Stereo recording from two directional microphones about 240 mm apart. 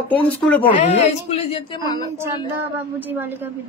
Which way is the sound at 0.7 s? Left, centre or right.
Left.